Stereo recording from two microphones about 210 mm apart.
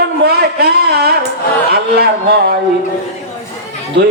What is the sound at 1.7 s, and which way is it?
Speech, 50° right (ahead or behind).